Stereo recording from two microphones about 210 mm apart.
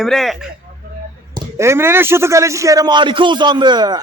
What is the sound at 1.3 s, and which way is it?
Speech, 15° right (ahead or behind).